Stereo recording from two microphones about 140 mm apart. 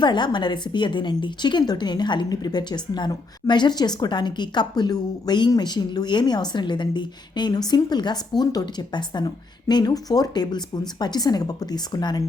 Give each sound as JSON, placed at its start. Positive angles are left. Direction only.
{"t": 0.0, "sound": "a woman's voice", "side_deg": 30}